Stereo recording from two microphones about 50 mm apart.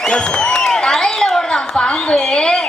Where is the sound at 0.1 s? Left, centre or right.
Centre.